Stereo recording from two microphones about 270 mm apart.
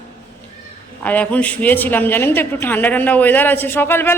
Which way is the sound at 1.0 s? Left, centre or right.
Centre.